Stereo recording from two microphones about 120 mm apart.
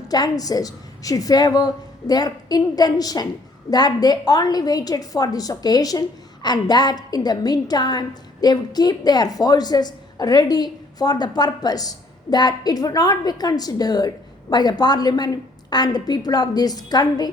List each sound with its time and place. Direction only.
0.1 s a woman's voice: 30° left (ahead or behind)